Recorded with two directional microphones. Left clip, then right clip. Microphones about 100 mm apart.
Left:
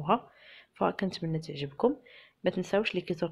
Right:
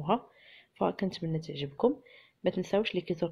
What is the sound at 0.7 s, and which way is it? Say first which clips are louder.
Speech: left 1 dB; 25° right (ahead or behind).